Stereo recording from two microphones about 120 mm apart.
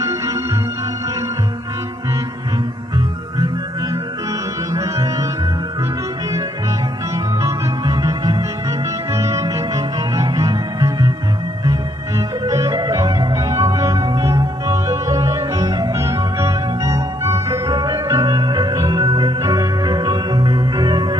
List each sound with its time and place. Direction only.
0.0 s music: 30° right (ahead or behind)
4.7 s music: 30° right (ahead or behind)
7.4 s music: 30° right (ahead or behind)
12.4 s music: 30° right (ahead or behind)